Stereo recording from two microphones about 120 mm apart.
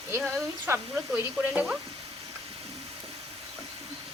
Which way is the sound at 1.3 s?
10° right (ahead or behind).